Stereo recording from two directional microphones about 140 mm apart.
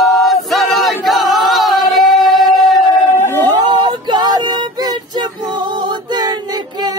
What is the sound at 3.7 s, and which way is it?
Female singing, 35° right (ahead or behind).